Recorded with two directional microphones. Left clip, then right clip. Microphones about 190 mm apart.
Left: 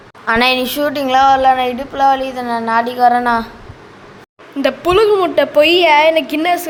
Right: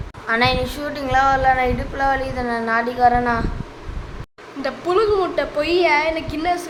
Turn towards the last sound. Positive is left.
turn(degrees=45)  # may be behind; listen again after turning